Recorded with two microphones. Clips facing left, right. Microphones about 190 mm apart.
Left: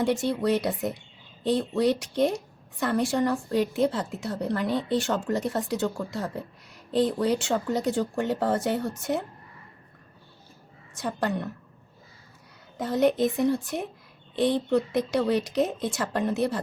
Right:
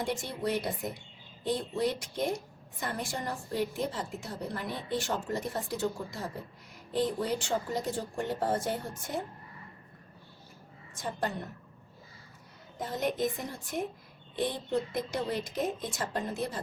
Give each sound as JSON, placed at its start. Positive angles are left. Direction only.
{"t": 0.0, "sound": "a woman's voice", "side_deg": 70}
{"t": 10.9, "sound": "a woman's voice", "side_deg": 75}
{"t": 12.8, "sound": "a woman's voice", "side_deg": 70}